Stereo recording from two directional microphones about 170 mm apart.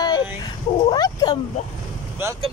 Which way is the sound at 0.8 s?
25° left (ahead or behind).